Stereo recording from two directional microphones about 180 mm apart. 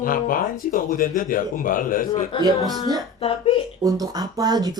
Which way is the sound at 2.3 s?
30° left (ahead or behind).